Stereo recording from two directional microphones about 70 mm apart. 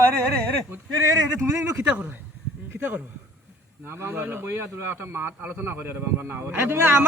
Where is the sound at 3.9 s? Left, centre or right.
Right.